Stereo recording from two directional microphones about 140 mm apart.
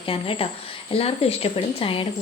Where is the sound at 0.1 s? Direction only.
40° left (ahead or behind).